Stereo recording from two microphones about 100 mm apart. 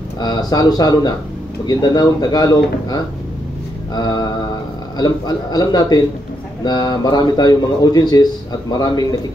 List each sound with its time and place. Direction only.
0.2 s a man's voice: 40° left (ahead or behind)